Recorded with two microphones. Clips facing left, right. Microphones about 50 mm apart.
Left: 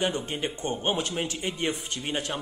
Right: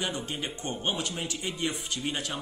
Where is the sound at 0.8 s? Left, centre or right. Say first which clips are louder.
Left 3 dB; left.